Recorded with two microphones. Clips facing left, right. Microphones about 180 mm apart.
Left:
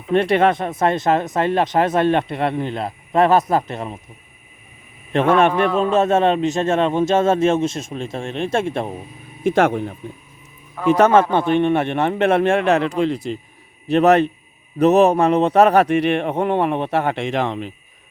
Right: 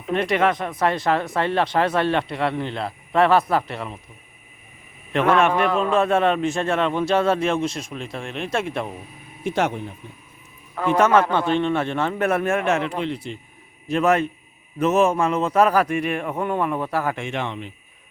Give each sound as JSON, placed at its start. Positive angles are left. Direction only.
{"t": 0.1, "sound": "speech", "side_deg": 30}
{"t": 3.1, "sound": "speech", "side_deg": 45}
{"t": 5.1, "sound": "speech", "side_deg": 30}
{"t": 9.6, "sound": "speech", "side_deg": 55}
{"t": 10.9, "sound": "speech", "side_deg": 30}
{"t": 11.3, "sound": "speech", "side_deg": 50}
{"t": 11.5, "sound": "speech", "side_deg": 20}
{"t": 13.8, "sound": "a man's voice", "side_deg": 65}
{"t": 14.8, "sound": "a man's voice", "side_deg": 35}
{"t": 15.2, "sound": "a man's voice", "side_deg": 65}
{"t": 16.1, "sound": "speech", "side_deg": 30}
{"t": 17.3, "sound": "a man's voice", "side_deg": 35}